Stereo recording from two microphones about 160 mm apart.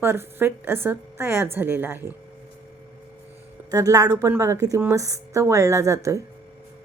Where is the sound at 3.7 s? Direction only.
20° right (ahead or behind).